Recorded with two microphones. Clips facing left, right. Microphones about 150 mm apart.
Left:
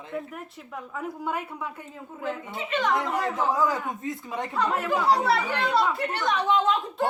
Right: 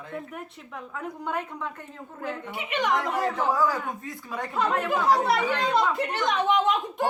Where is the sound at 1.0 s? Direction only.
5° left (ahead or behind).